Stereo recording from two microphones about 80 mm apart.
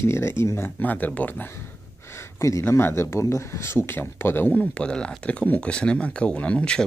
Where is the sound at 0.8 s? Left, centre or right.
Left.